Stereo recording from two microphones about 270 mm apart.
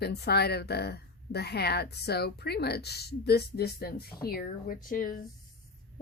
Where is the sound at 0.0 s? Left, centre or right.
Left.